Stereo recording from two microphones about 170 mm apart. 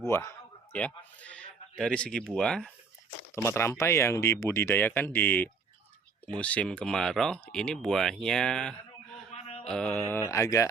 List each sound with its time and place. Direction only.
0.1 s speech: 15° left (ahead or behind)
3.3 s speech: 15° left (ahead or behind)
9.3 s a sound: 40° left (ahead or behind)
9.6 s speech: 5° left (ahead or behind)
10.1 s speech: 15° left (ahead or behind)